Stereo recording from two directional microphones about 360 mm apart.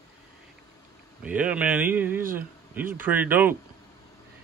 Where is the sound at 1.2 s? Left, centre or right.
Centre.